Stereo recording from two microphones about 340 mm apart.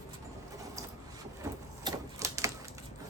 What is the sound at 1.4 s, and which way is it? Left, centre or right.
Printer, centre.